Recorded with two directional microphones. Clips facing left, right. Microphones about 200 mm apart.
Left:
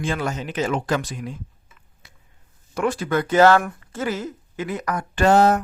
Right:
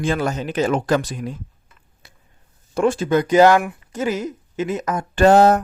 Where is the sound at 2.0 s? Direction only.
35° right (ahead or behind).